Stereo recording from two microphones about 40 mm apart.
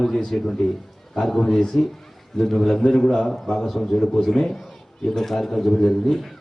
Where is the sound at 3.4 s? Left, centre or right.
Centre.